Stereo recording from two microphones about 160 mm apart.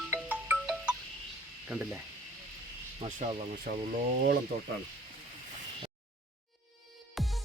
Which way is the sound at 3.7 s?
65° right (ahead or behind).